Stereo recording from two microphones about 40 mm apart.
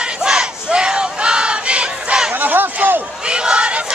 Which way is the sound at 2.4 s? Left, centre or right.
Right.